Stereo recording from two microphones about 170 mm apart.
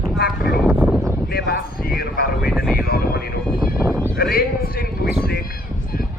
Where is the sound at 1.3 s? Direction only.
65° left (ahead or behind).